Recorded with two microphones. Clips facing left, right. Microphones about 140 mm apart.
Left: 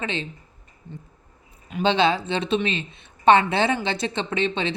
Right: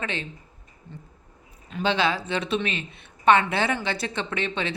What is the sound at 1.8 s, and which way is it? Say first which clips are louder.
A woman's voice: left 4 dB; 25° left (ahead or behind).